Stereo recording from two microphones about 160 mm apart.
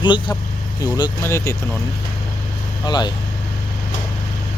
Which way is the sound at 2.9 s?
25° left (ahead or behind).